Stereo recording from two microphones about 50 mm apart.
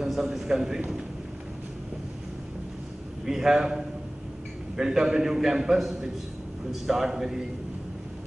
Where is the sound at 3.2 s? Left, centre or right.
Centre.